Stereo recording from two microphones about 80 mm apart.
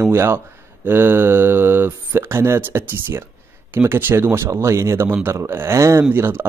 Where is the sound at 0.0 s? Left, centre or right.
Right.